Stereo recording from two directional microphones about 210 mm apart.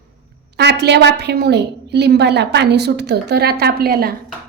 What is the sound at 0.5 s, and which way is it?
A woman's voice, 55° right (ahead or behind).